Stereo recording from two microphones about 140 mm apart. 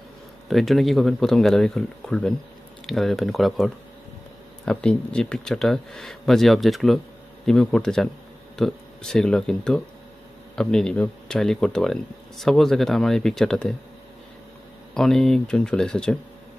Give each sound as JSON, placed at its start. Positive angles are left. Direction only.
{"t": 0.5, "sound": "speech", "side_deg": 0}
{"t": 15.0, "sound": "speech", "side_deg": 5}